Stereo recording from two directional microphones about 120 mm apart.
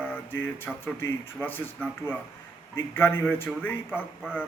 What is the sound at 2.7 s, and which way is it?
Speech, 20° left (ahead or behind).